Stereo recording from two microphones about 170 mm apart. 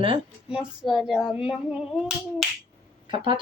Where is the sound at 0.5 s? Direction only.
5° right (ahead or behind).